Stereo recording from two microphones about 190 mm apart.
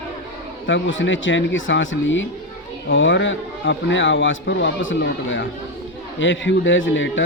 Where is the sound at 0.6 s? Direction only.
75° left (ahead or behind).